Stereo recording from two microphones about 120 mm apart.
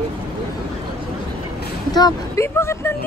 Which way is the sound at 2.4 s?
20° left (ahead or behind).